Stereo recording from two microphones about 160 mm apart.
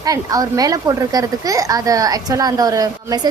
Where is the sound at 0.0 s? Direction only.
20° right (ahead or behind).